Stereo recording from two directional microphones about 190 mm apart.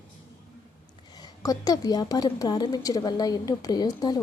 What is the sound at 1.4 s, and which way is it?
A woman's voice, 20° left (ahead or behind).